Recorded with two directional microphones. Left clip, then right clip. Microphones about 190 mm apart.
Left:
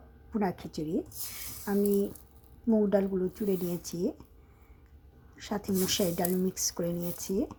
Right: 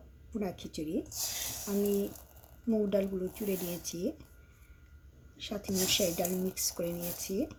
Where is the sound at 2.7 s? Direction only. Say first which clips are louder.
Left 4 dB; 15° left (ahead or behind).